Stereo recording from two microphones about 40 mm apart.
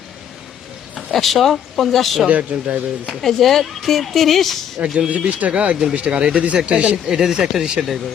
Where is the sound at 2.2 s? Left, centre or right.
Right.